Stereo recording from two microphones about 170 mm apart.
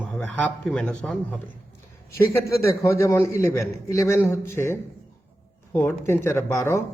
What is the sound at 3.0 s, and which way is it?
A man's voice, 15° left (ahead or behind).